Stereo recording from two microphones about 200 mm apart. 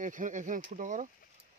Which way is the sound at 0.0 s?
40° right (ahead or behind).